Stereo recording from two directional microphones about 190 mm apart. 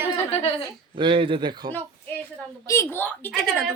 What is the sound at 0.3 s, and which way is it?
Speech, 35° left (ahead or behind).